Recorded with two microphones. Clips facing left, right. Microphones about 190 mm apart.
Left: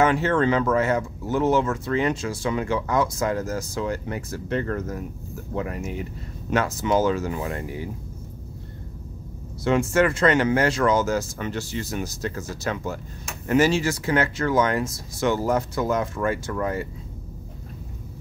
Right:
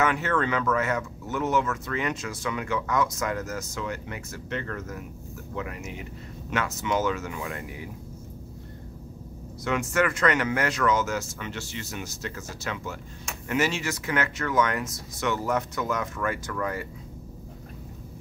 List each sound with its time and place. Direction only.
0.0 s speech: 30° left (ahead or behind)
9.7 s speech: 30° left (ahead or behind)